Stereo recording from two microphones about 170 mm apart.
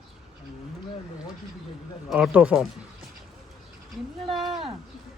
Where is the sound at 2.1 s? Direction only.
5° right (ahead or behind).